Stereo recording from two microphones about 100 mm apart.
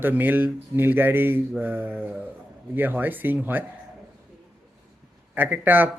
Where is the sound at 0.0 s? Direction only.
20° right (ahead or behind).